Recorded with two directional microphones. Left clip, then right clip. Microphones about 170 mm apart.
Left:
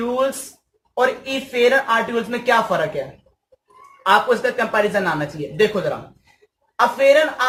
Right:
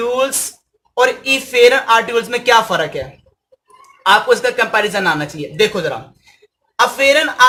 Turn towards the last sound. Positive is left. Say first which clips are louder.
# right 1 dB
turn(degrees=-40)  # may be behind; listen again after turning